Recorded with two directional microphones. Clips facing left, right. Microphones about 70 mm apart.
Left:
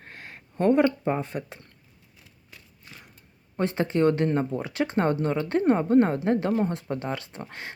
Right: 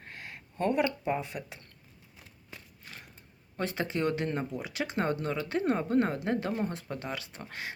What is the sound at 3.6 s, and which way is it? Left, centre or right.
Speech, left.